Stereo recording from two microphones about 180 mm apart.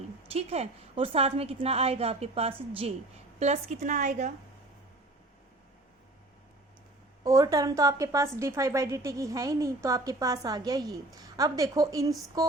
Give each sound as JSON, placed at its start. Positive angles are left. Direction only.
{"t": 0.3, "sound": "a woman's voice", "side_deg": -35}
{"t": 7.3, "sound": "a woman's voice", "side_deg": -20}
{"t": 12.4, "sound": "a sound", "side_deg": -20}